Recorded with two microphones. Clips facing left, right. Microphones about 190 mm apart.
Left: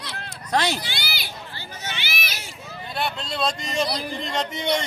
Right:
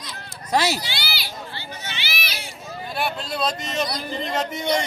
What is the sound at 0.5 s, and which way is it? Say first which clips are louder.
Speech: right 2 dB; 5° right (ahead or behind).